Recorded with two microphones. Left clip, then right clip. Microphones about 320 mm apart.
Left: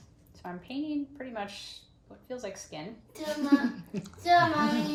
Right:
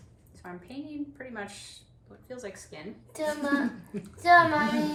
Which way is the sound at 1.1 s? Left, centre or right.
Centre.